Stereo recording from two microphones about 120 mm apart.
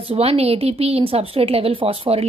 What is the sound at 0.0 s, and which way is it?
A woman's voice, 55° right (ahead or behind).